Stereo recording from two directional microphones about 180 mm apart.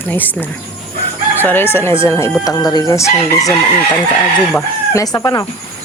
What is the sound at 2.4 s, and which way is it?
Chicken, 20° left (ahead or behind).